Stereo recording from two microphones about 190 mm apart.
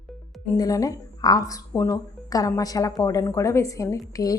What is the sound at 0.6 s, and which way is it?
A woman's voice, 20° left (ahead or behind).